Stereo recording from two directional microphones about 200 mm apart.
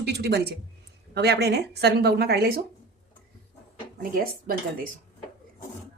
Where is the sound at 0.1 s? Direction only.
55° right (ahead or behind).